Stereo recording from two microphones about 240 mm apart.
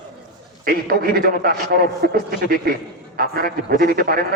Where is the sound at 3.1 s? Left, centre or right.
Right.